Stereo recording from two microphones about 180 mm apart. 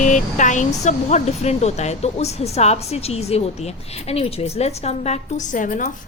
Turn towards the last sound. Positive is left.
turn(degrees=45)  # may be behind; listen again after turning